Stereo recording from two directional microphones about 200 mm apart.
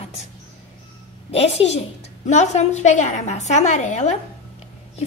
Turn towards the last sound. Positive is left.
turn(degrees=35)  # may be behind; listen again after turning